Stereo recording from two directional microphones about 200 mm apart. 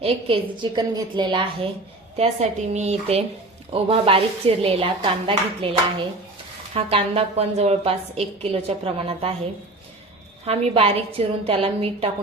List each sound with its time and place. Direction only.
0.0 s a woman's voice: 25° right (ahead or behind)
10.4 s a woman's voice: 30° right (ahead or behind)